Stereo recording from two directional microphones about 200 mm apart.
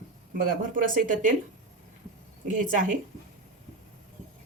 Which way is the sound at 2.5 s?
40° right (ahead or behind).